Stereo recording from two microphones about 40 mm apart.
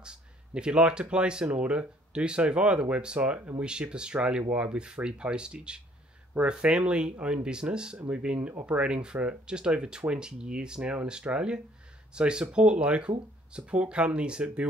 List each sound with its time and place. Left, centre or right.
0.0 s speech: right